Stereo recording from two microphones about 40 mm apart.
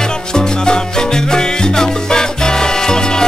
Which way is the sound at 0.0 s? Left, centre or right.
Centre.